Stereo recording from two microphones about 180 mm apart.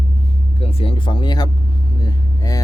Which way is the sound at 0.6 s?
30° left (ahead or behind).